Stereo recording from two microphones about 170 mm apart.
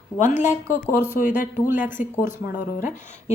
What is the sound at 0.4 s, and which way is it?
Speech, 45° left (ahead or behind).